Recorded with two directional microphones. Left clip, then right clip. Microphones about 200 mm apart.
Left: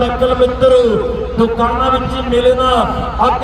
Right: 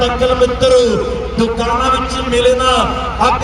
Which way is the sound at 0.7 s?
90° left.